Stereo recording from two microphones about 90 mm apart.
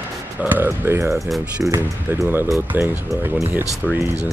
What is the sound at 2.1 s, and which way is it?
Speech, 20° right (ahead or behind).